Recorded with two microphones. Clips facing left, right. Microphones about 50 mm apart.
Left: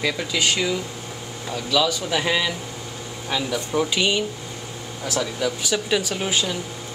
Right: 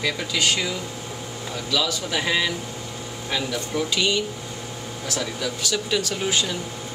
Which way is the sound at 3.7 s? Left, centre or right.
Centre.